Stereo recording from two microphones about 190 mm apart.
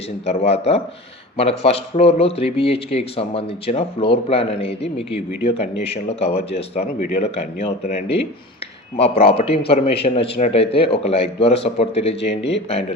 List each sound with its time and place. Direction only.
0.3 s a man's voice: 30° left (ahead or behind)